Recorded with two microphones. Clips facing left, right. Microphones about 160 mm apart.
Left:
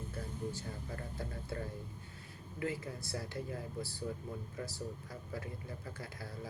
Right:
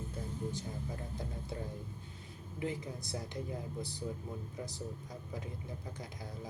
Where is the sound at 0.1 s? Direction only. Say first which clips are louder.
Right 1 dB; 20° right (ahead or behind).